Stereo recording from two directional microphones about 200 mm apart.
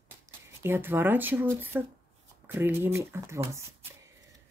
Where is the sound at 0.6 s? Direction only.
10° right (ahead or behind).